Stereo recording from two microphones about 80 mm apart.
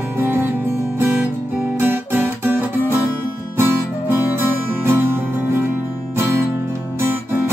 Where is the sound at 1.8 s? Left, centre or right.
Right.